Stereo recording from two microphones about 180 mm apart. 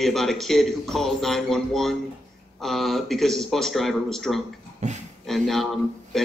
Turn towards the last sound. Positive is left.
turn(degrees=0)  # may be behind; listen again after turning